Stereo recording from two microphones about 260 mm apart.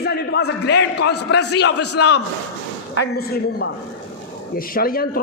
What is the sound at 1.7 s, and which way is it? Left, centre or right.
Speech, left.